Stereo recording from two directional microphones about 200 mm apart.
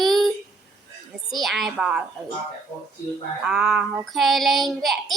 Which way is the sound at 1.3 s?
Centre (ahead or behind).